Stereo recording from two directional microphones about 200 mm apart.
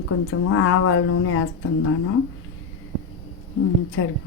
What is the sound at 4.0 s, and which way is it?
Speech, 75° left (ahead or behind).